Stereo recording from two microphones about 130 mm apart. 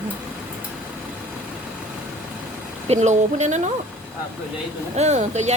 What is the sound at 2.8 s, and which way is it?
Speech, 65° right (ahead or behind).